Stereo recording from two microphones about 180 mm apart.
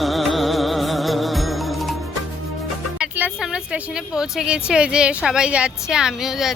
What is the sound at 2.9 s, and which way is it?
A woman's voice, 5° right (ahead or behind).